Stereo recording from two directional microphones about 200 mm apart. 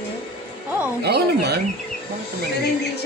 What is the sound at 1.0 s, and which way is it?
Speech, 55° right (ahead or behind).